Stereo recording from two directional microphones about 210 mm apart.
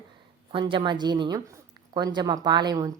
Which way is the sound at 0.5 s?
25° right (ahead or behind).